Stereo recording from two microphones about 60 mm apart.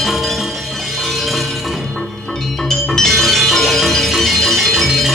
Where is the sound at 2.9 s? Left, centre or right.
Centre.